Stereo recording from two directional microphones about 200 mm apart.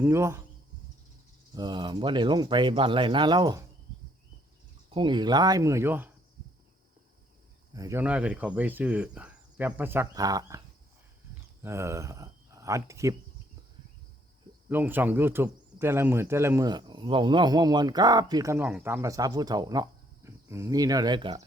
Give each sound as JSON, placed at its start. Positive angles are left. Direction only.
{"t": 0.0, "sound": "speech", "side_deg": -15}
{"t": 1.5, "sound": "speech", "side_deg": -20}
{"t": 4.9, "sound": "speech", "side_deg": -25}
{"t": 7.7, "sound": "speech", "side_deg": -15}
{"t": 11.6, "sound": "speech", "side_deg": -15}
{"t": 14.7, "sound": "speech", "side_deg": -10}